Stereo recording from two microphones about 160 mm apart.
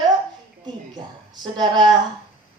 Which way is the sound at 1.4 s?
25° right (ahead or behind).